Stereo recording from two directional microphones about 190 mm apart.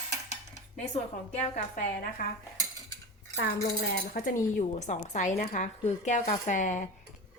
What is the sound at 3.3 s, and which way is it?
Cutlery, 60° left (ahead or behind).